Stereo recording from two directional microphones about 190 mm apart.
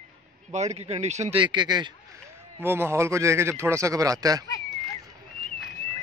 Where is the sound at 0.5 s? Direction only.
35° right (ahead or behind).